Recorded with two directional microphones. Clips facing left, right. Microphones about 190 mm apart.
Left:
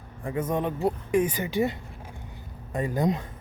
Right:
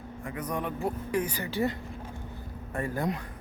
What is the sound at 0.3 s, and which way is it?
Speech, 25° left (ahead or behind).